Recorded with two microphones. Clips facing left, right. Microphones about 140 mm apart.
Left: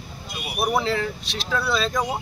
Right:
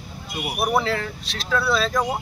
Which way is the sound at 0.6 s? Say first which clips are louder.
Even; centre (ahead or behind).